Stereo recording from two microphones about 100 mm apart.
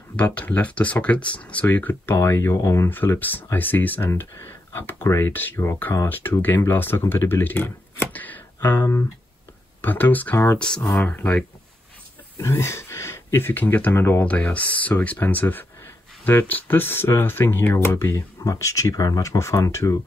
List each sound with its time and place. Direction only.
0.1 s speech: 15° left (ahead or behind)
12.4 s speech: 25° left (ahead or behind)
14.2 s speech: 15° left (ahead or behind); by 20.0 s 30° left (ahead or behind)